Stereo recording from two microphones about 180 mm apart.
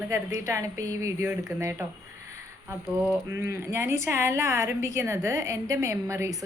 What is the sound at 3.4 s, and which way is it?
Speech, 15° right (ahead or behind).